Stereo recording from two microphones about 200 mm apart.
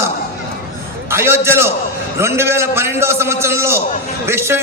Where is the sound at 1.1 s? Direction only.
10° right (ahead or behind).